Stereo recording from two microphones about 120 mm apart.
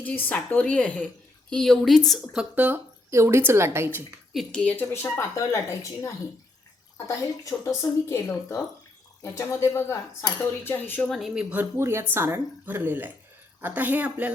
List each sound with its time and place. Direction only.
0.0 s speech: 15° left (ahead or behind)
2.3 s speech: 10° right (ahead or behind)
4.4 s speech: 10° left (ahead or behind)
4.9 s speech: 25° left (ahead or behind)
11.1 s speech: 5° right (ahead or behind)